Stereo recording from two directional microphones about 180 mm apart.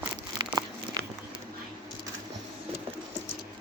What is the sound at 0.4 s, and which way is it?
Crumpling, 25° right (ahead or behind).